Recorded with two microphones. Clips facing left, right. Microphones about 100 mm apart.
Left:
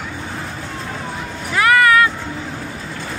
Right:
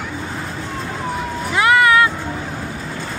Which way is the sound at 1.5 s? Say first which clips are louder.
Even; 20° right (ahead or behind).